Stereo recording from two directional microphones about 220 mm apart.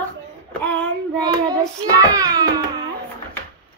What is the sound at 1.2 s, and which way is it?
A child's voice, 15° right (ahead or behind).